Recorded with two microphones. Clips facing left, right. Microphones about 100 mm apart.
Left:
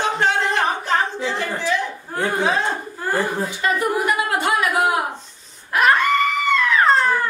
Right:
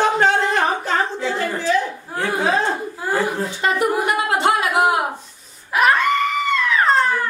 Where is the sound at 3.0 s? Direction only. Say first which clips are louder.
Even; 10° right (ahead or behind).